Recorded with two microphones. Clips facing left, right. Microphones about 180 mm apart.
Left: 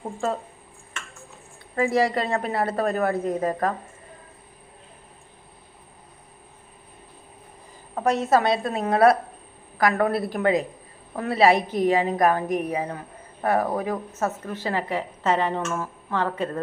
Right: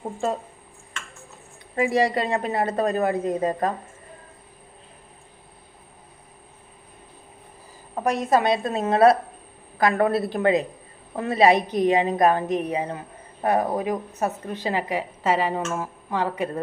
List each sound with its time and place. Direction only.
1.7 s a woman's voice: 15° right (ahead or behind)
8.0 s a woman's voice: 15° right (ahead or behind)